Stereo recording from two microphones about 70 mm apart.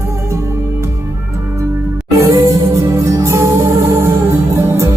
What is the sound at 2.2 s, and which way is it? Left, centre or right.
Music, right.